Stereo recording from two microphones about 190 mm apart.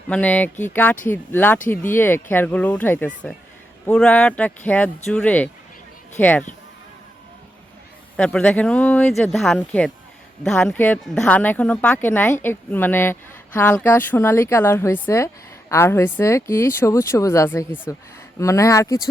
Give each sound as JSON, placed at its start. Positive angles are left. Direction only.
{"t": 0.1, "sound": "speech", "side_deg": 10}
{"t": 8.1, "sound": "speech", "side_deg": 5}